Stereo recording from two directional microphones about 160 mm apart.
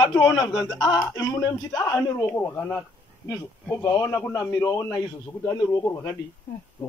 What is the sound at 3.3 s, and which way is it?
A man's voice, 20° left (ahead or behind).